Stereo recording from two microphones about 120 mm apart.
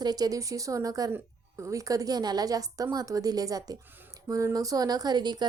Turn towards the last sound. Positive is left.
turn(degrees=-35)  # may be behind; listen again after turning